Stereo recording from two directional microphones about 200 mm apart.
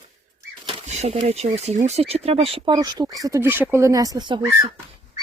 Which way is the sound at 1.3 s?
30° right (ahead or behind).